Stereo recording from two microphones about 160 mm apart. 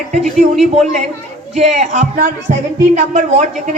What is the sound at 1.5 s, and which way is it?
A woman's voice, 45° right (ahead or behind).